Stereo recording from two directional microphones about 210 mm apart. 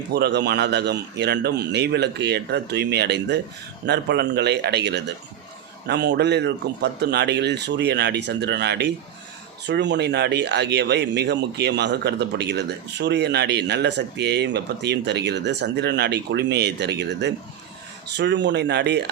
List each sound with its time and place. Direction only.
0.1 s speech: 50° right (ahead or behind)